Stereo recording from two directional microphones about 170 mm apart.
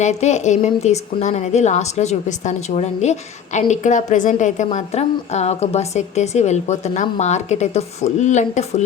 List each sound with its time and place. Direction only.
0.0 s a woman's voice: 40° left (ahead or behind)